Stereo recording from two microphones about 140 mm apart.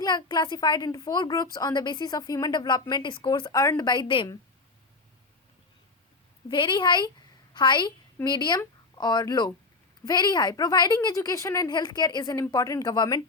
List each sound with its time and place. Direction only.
0.0 s a woman's voice: 30° left (ahead or behind)
6.5 s a woman's voice: 35° left (ahead or behind)